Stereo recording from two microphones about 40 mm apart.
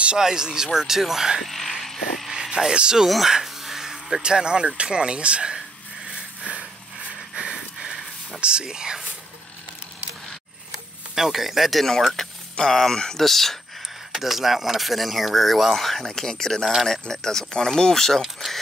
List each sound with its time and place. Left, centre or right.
0.2 s speech: centre
1.4 s speech: centre
1.8 s vehicle: centre
2.7 s speech: right
3.3 s a sound: centre
4.2 s speech: right
6.4 s a sound: right
8.4 s speech: right
11.1 s speech: centre
14.1 s speech: centre
18.2 s speech: centre